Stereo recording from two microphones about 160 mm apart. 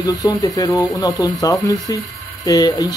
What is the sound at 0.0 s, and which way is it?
Speech, 25° left (ahead or behind).